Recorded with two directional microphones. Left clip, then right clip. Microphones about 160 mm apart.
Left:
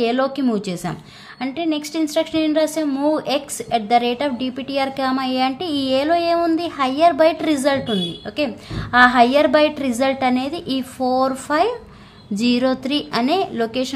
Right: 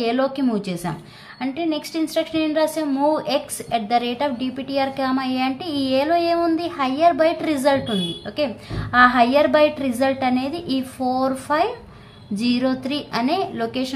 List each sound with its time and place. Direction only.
0.0 s a woman's voice: 25° left (ahead or behind)